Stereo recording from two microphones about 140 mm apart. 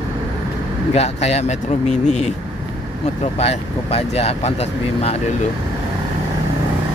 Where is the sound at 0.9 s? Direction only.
50° left (ahead or behind).